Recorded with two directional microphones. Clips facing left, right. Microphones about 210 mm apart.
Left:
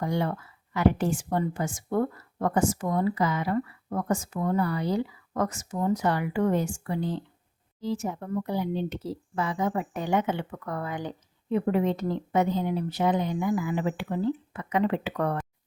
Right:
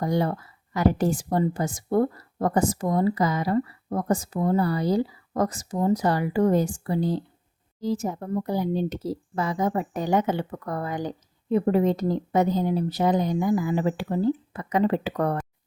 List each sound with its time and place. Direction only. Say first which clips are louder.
0.0 s speech: right 4 dB; 40° right (ahead or behind)